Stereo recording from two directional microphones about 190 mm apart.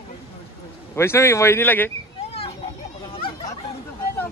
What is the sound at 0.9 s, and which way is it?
Speech, 15° left (ahead or behind).